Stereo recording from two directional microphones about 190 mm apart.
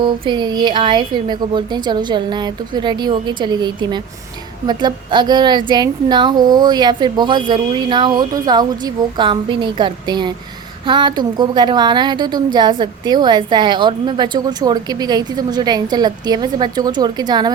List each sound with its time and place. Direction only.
0.0 s a woman's voice: 25° right (ahead or behind)